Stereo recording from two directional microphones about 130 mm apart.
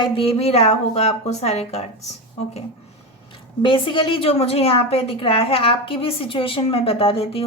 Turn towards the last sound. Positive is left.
turn(degrees=50)  # may be behind; listen again after turning